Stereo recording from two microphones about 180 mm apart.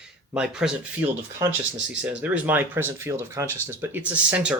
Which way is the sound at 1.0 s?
15° right (ahead or behind).